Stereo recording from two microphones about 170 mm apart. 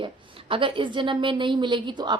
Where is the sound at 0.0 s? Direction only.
30° right (ahead or behind).